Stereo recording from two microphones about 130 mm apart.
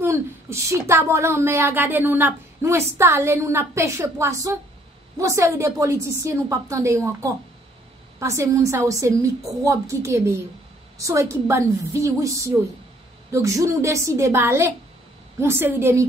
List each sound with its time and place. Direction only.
0.0 s speech: 20° right (ahead or behind)
8.2 s speech: 25° right (ahead or behind)